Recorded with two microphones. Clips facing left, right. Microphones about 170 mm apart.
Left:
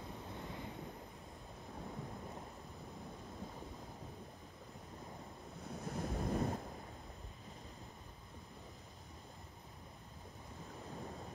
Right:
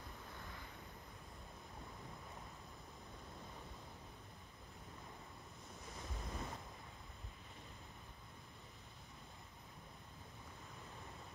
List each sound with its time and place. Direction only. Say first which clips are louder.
5.9 s waves: left 12 dB; 55° left (ahead or behind)